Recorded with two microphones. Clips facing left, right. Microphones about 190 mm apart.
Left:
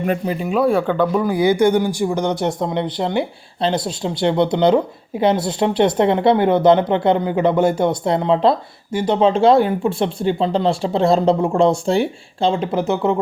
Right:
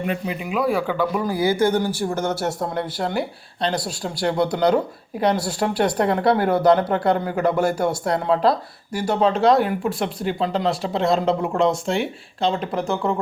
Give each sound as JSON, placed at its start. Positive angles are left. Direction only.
{"t": 0.0, "sound": "speech", "side_deg": 40}
{"t": 12.7, "sound": "speech", "side_deg": 5}